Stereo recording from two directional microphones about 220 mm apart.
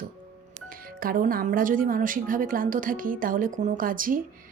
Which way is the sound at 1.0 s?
40° right (ahead or behind).